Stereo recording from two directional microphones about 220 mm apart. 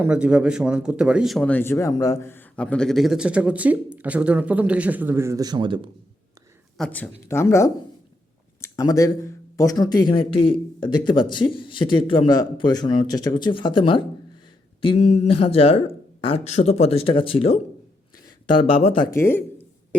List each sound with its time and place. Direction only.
0.0 s speech: 5° right (ahead or behind)
6.7 s speech: 5° left (ahead or behind); by 19.0 s 25° left (ahead or behind)
19.1 s a sound: 10° left (ahead or behind)